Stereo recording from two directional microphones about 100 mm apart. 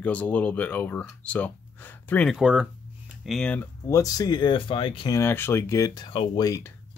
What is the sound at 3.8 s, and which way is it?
Speech, 35° left (ahead or behind).